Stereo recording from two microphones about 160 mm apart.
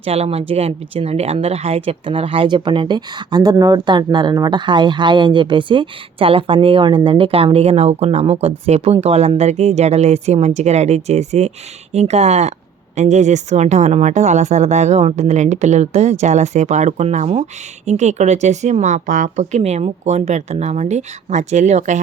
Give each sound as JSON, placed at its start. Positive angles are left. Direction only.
{"t": 0.0, "sound": "speech", "side_deg": -40}